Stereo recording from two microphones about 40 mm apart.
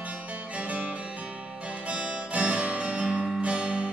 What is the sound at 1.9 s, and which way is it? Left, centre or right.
Music, right.